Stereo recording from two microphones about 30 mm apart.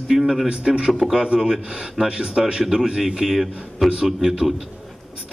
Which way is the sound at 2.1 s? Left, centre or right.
Right.